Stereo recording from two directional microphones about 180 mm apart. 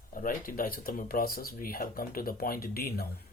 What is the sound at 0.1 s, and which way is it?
Speech, 50° left (ahead or behind).